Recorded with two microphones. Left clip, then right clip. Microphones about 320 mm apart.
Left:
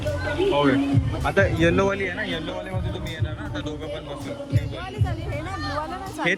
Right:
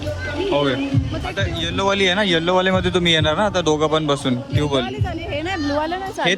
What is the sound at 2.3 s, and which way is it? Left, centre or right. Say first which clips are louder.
Speech: right 13 dB; right.